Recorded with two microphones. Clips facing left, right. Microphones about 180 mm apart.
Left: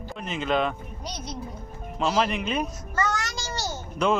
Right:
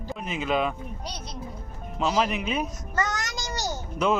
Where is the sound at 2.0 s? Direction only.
5° right (ahead or behind).